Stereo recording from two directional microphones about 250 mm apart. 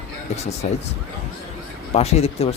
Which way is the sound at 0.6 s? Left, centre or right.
Left.